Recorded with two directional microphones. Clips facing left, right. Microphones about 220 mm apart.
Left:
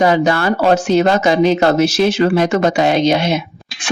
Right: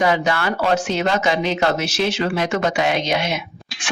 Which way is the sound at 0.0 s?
40° left (ahead or behind).